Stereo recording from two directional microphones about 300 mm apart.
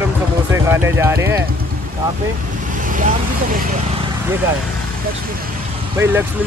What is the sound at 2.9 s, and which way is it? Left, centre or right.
Speech, right.